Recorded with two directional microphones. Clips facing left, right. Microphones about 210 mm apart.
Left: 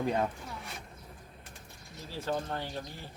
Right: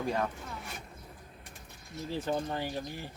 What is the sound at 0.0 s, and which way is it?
Speech, 20° left (ahead or behind).